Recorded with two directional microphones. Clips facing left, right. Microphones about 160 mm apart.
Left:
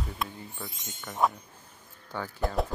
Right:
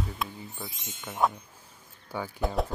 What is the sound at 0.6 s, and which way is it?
Speech, 10° right (ahead or behind).